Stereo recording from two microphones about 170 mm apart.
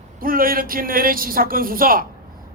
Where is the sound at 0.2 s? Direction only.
55° right (ahead or behind).